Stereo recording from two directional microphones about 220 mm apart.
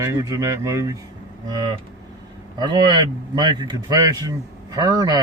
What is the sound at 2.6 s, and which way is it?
A man's voice, 20° right (ahead or behind).